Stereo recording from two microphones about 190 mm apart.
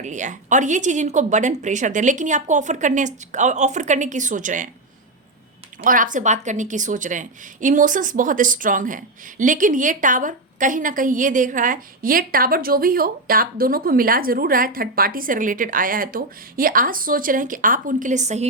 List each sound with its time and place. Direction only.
0.0 s a woman's voice: 40° right (ahead or behind)
5.8 s a woman's voice: 45° right (ahead or behind)